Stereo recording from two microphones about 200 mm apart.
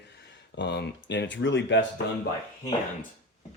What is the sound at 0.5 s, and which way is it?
Speech, 60° left (ahead or behind).